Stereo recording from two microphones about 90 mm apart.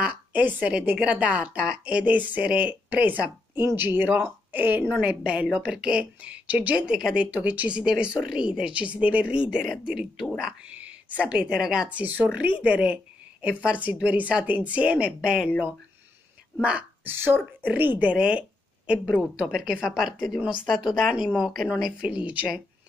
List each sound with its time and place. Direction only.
0.0 s a woman's voice: 15° right (ahead or behind)
16.6 s speech: 15° right (ahead or behind)
17.1 s a woman's voice: 25° right (ahead or behind)